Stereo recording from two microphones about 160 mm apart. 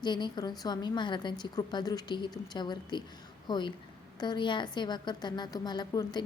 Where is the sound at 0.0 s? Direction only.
30° left (ahead or behind).